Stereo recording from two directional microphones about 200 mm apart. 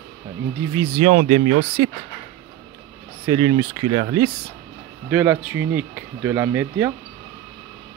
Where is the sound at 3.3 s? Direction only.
20° right (ahead or behind).